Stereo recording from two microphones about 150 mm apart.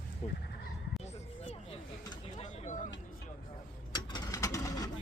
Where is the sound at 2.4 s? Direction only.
55° left (ahead or behind).